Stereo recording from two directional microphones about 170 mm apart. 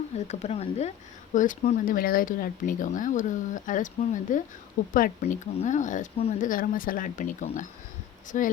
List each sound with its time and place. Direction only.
0.3 s speech: 40° left (ahead or behind)